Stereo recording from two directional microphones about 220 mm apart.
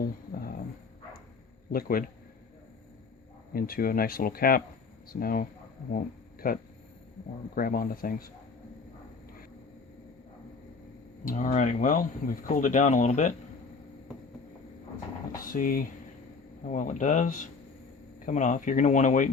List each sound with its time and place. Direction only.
1.7 s speech: 40° left (ahead or behind)
3.5 s speech: 40° left (ahead or behind)
11.3 s speech: 35° left (ahead or behind)
15.5 s speech: 40° left (ahead or behind)